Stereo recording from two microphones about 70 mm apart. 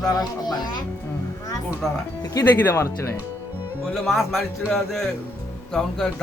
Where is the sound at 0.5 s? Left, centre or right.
Left.